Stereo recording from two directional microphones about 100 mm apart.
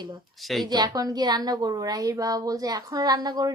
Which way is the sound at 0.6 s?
40° right (ahead or behind).